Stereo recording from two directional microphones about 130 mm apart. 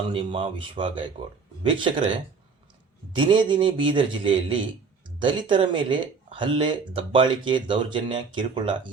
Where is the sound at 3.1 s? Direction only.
40° right (ahead or behind).